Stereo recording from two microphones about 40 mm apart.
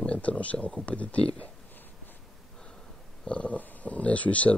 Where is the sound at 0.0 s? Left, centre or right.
Left.